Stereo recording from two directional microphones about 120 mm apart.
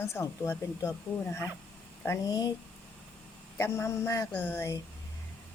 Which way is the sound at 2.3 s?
35° left (ahead or behind).